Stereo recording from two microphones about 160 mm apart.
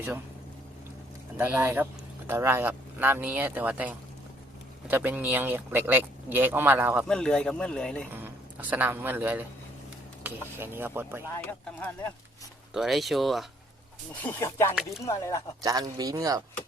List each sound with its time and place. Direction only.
1.4 s speech: 15° right (ahead or behind)
7.1 s speech: 5° left (ahead or behind)
8.1 s speech: 10° right (ahead or behind)
11.4 s speech: 10° left (ahead or behind)
12.7 s speech: centre (ahead or behind)
14.2 s speech: 15° left (ahead or behind)
15.6 s speech: 25° right (ahead or behind)